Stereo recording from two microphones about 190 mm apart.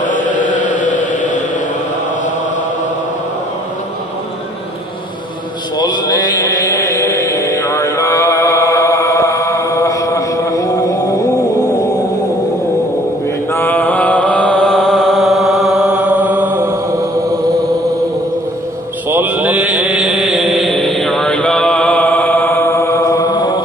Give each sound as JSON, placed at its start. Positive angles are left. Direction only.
{"t": 0.0, "sound": "chant", "side_deg": 45}
{"t": 5.8, "sound": "chant", "side_deg": 20}
{"t": 13.5, "sound": "mantra", "side_deg": 10}
{"t": 19.0, "sound": "chant", "side_deg": -10}